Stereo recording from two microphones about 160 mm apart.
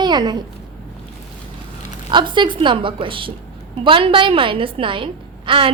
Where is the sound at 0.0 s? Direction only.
25° right (ahead or behind).